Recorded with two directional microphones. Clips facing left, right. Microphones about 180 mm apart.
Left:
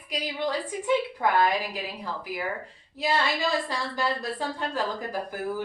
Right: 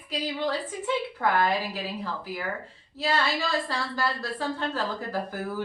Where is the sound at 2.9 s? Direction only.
15° left (ahead or behind).